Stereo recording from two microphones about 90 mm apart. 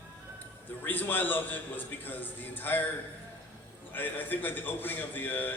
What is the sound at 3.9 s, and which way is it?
A man's voice, 20° left (ahead or behind).